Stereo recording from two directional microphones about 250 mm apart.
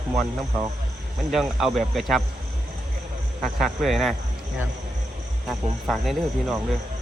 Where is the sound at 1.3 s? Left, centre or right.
Centre.